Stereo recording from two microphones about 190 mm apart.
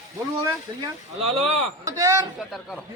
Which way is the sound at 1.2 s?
30° right (ahead or behind).